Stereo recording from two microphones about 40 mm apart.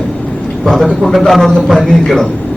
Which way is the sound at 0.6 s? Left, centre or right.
Centre.